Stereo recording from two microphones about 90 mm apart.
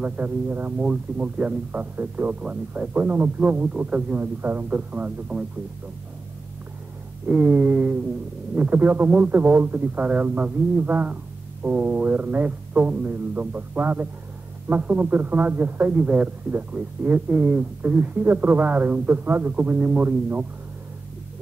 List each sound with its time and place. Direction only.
0.0 s speech: 15° right (ahead or behind)
7.2 s a sound: 15° right (ahead or behind)
8.5 s speech: 20° right (ahead or behind)